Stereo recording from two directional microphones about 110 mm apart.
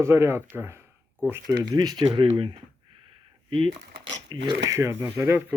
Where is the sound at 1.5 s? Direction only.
40° right (ahead or behind).